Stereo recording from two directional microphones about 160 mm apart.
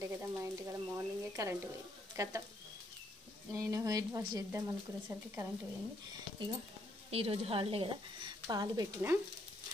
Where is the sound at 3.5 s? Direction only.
20° right (ahead or behind).